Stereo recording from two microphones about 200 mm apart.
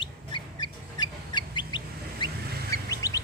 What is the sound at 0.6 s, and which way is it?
Chicken, 20° left (ahead or behind).